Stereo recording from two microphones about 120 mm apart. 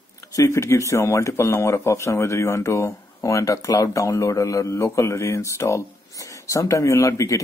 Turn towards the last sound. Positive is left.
turn(degrees=25)  # may be behind; listen again after turning